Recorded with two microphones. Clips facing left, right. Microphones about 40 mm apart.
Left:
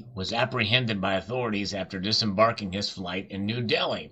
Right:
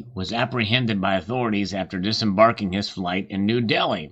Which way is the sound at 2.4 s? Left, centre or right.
Right.